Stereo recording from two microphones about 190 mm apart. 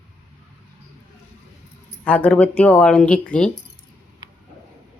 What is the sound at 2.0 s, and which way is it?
Speech, 5° left (ahead or behind).